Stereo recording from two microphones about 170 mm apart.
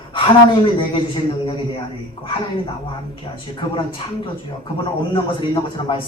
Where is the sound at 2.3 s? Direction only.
30° left (ahead or behind).